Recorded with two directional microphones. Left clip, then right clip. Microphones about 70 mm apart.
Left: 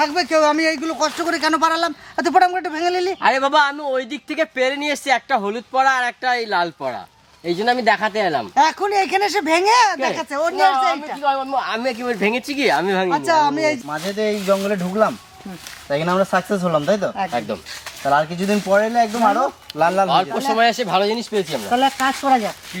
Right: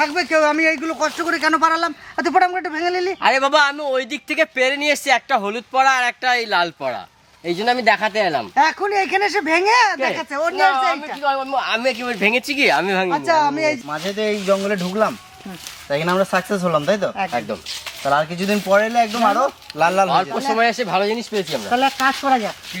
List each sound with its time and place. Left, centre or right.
0.0 s speech: left
3.2 s a man's voice: centre
8.5 s speech: left
11.2 s a man's voice: centre
13.1 s speech: left
13.9 s a man's voice: right
20.1 s speech: centre
21.7 s speech: centre